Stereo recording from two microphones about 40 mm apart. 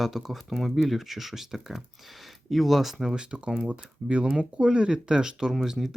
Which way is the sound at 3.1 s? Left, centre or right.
Right.